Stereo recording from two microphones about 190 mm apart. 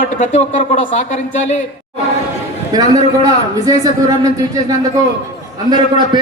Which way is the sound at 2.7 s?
20° right (ahead or behind).